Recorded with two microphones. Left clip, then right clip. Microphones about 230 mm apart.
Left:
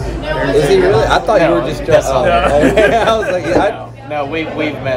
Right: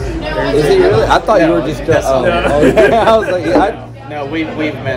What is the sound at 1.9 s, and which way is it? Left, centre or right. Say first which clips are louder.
Speech: left 1 dB; left.